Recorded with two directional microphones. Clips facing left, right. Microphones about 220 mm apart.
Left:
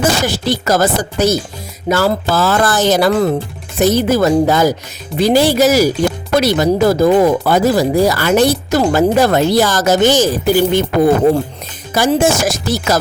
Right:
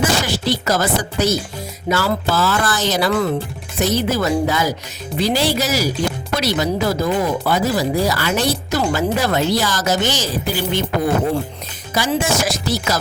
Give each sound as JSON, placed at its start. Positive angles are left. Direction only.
{"t": 0.0, "sound": "speech", "side_deg": 45}
{"t": 11.9, "sound": "speech", "side_deg": 50}